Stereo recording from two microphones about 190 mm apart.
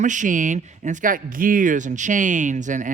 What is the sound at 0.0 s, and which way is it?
Speech, 40° right (ahead or behind).